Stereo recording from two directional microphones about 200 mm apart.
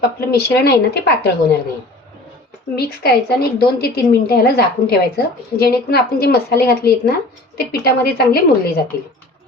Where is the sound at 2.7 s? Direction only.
50° left (ahead or behind).